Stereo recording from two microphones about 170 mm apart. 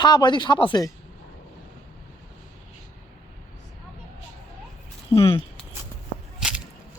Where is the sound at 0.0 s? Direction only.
25° left (ahead or behind).